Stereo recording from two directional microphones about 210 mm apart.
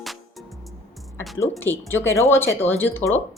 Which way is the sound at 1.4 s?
10° left (ahead or behind).